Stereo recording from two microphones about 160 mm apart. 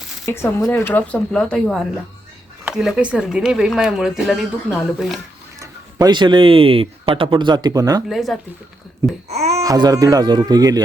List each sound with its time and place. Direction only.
0.3 s speech: 15° left (ahead or behind); by 5.2 s centre (ahead or behind)
5.5 s speech: 25° right (ahead or behind)
8.1 s speech: centre (ahead or behind)
9.3 s speech: 40° right (ahead or behind)
9.6 s speech: 25° right (ahead or behind)